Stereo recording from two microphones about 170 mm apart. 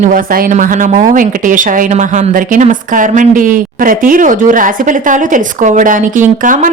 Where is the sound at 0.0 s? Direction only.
55° right (ahead or behind).